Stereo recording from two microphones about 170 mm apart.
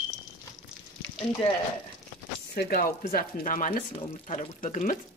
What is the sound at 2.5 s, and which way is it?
Speech, 65° left (ahead or behind).